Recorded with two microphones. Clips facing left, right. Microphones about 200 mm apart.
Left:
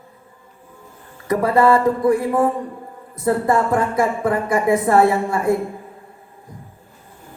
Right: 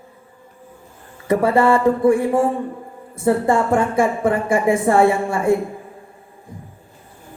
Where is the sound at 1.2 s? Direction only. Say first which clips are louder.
Even; 25° right (ahead or behind).